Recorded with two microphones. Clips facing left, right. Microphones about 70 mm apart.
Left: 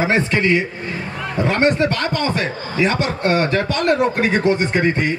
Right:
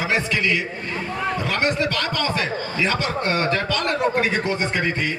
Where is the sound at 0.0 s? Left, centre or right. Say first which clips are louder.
Left 5 dB; left.